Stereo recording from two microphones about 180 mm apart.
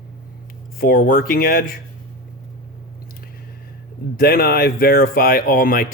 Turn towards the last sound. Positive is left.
turn(degrees=50)  # may be behind; listen again after turning